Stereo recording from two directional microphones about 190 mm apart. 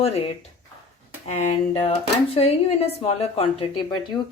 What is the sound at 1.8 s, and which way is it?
A woman's voice, 30° left (ahead or behind).